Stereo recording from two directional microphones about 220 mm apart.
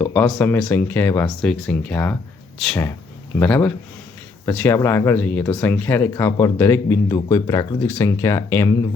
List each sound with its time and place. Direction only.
0.0 s speech: 5° left (ahead or behind)